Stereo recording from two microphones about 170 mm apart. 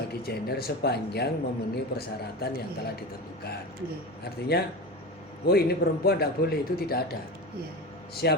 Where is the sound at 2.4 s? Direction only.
65° left (ahead or behind).